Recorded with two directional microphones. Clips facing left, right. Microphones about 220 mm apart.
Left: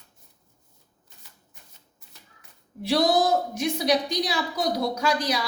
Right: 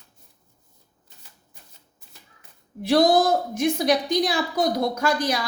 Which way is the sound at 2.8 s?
50° right (ahead or behind).